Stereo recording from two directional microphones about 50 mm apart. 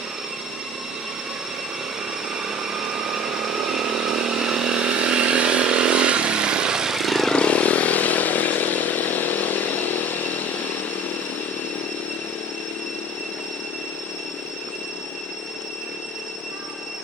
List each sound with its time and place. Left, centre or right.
2.4 s vehicle: centre
7.3 s chainsaw: left